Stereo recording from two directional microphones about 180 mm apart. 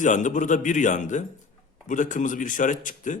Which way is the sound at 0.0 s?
45° left (ahead or behind).